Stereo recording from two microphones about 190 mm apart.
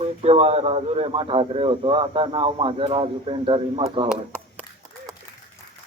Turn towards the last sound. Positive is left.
turn(degrees=-25)  # may be behind; listen again after turning